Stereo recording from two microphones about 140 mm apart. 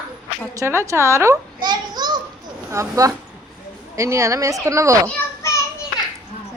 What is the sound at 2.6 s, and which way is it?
A woman's voice, 20° right (ahead or behind).